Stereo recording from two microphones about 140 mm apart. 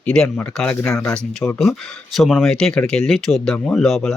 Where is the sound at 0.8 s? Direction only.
20° left (ahead or behind).